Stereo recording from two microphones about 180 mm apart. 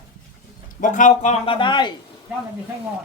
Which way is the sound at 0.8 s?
45° left (ahead or behind).